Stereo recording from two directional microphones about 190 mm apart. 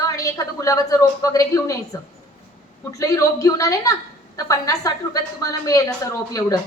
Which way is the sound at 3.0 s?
15° left (ahead or behind).